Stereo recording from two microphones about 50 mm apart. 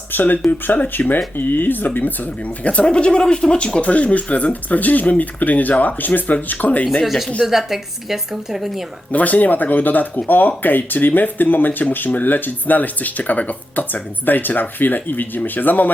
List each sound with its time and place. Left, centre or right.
0.1 s speech: left
2.6 s speech: left
7.0 s a woman's voice: centre
9.1 s speech: left